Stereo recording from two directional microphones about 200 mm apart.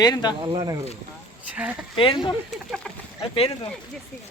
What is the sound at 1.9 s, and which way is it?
Speech, 25° left (ahead or behind).